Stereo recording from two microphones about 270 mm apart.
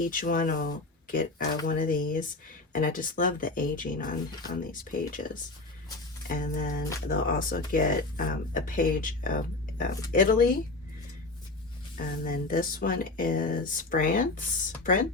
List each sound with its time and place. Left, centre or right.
0.0 s speech: left
11.9 s speech: left